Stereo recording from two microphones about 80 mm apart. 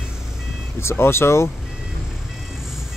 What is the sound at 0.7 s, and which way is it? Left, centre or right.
Speech, left.